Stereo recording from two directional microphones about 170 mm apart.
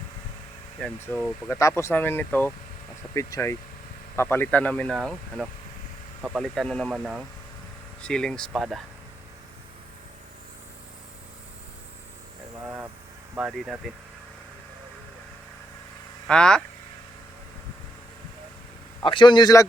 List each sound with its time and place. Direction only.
1.0 s speech: 10° left (ahead or behind)
12.6 s vehicle: 10° right (ahead or behind)
13.5 s speech: centre (ahead or behind)
16.2 s speech: 5° left (ahead or behind)
19.0 s a man's voice: 25° left (ahead or behind)